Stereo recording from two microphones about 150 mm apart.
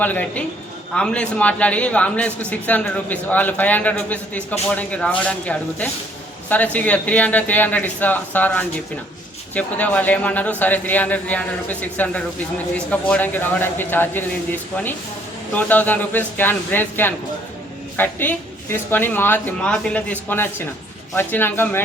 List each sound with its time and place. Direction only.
0.0 s a man's voice: 10° left (ahead or behind)